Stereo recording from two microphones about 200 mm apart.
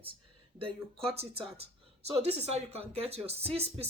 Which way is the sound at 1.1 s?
30° right (ahead or behind).